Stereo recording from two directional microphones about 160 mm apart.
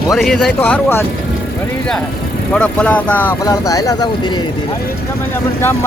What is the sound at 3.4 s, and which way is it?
Speech, 20° left (ahead or behind).